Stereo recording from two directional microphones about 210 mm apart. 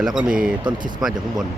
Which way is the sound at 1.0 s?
Centre (ahead or behind).